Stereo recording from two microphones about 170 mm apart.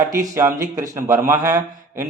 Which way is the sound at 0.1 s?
15° right (ahead or behind).